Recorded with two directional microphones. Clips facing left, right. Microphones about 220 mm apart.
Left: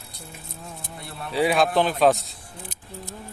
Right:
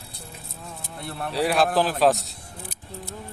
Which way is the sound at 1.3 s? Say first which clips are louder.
Left 1 dB; centre (ahead or behind).